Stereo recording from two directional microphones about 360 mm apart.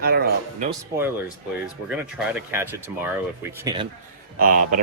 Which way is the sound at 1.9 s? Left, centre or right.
Centre.